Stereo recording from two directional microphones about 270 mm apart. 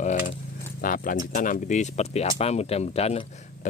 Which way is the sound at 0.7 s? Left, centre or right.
Left.